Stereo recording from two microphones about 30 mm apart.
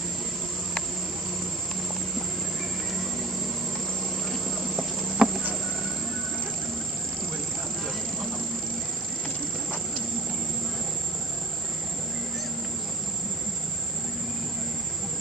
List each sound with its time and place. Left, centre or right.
4.3 s insect: centre
5.2 s insect: right